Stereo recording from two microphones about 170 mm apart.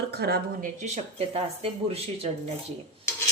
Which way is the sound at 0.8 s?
40° right (ahead or behind).